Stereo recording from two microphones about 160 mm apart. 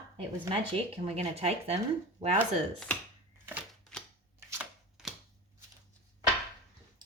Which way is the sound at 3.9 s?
5° left (ahead or behind).